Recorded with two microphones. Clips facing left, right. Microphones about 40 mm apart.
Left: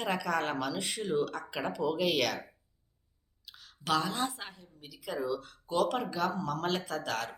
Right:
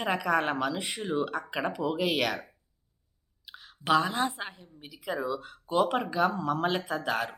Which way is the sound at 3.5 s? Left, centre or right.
Right.